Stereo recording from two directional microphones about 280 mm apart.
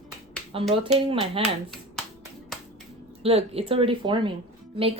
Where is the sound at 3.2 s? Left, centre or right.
Right.